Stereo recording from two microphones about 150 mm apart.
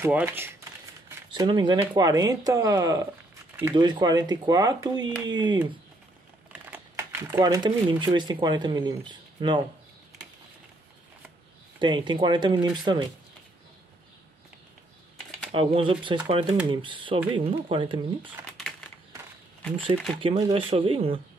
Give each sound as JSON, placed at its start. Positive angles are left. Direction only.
{"t": 0.0, "sound": "speech", "side_deg": -15}
{"t": 1.3, "sound": "speech", "side_deg": -30}
{"t": 6.7, "sound": "typing", "side_deg": -15}
{"t": 7.4, "sound": "speech", "side_deg": -25}
{"t": 11.8, "sound": "speech", "side_deg": -35}
{"t": 15.5, "sound": "speech", "side_deg": -35}
{"t": 20.2, "sound": "speech", "side_deg": -35}